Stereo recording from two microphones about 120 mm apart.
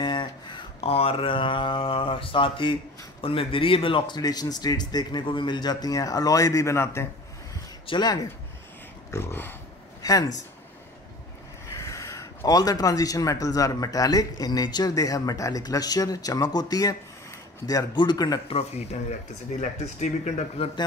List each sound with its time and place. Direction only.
0.0 s a sound: 40° left (ahead or behind)
0.7 s speech: 55° left (ahead or behind)
4.2 s speech: 35° left (ahead or behind)
7.8 s speech: 40° left (ahead or behind)
9.1 s dog: 20° left (ahead or behind)
10.0 s speech: 30° left (ahead or behind)
11.7 s speech: 25° left (ahead or behind)
18.5 s speech: 60° left (ahead or behind)
19.6 s speech: 85° left; by 20.7 s 65° left (ahead or behind)